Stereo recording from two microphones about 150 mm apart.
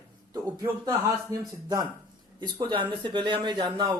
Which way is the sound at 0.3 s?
25° right (ahead or behind).